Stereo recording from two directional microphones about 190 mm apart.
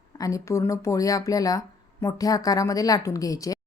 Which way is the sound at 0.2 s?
15° left (ahead or behind).